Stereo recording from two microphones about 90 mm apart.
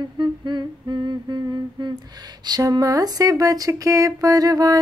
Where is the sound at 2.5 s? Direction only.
45° right (ahead or behind).